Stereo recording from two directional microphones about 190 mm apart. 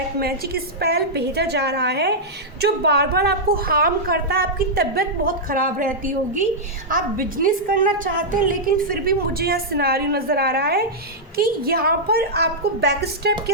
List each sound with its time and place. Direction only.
0.2 s a woman's voice: 55° right (ahead or behind)